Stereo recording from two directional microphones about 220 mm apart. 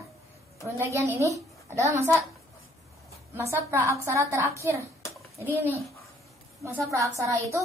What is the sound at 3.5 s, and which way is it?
A child's voice, 10° right (ahead or behind).